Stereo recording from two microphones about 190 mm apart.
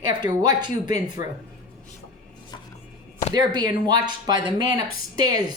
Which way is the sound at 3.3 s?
20° right (ahead or behind).